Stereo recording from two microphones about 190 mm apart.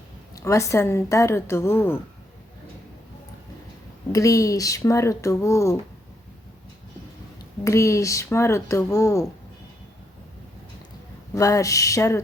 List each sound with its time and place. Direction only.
0.3 s speech: 15° left (ahead or behind)
4.1 s speech: 15° left (ahead or behind)
7.6 s speech: 15° left (ahead or behind)
11.3 s speech: 15° left (ahead or behind)